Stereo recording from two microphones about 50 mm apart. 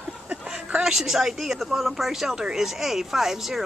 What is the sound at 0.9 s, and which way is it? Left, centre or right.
Speech, centre.